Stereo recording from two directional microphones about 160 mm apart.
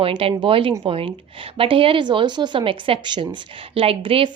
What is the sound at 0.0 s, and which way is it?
A woman's voice, 35° right (ahead or behind).